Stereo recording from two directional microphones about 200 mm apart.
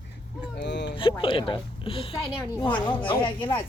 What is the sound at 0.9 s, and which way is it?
Speech, 25° left (ahead or behind).